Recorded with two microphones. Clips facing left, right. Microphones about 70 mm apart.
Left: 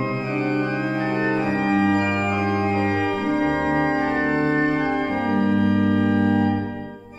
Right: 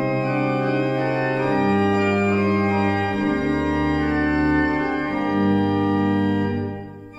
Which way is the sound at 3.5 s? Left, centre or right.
Left.